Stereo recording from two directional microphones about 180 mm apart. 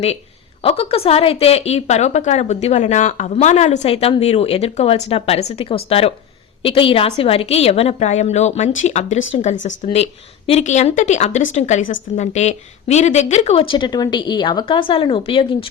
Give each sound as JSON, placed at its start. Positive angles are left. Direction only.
{"t": 0.6, "sound": "a woman's voice", "side_deg": 30}